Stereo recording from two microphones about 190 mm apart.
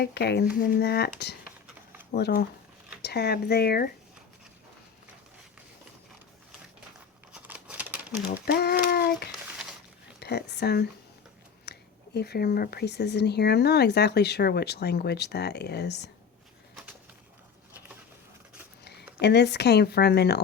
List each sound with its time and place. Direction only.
0.0 s speech: 60° left (ahead or behind)
7.3 s crumpling: 5° right (ahead or behind)
8.4 s speech: 55° left (ahead or behind)
19.2 s speech: 60° left (ahead or behind)